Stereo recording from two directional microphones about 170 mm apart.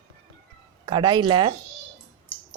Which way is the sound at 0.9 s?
25° right (ahead or behind).